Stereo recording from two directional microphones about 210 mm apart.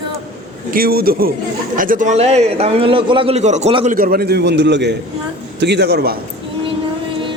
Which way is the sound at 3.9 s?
45° right (ahead or behind).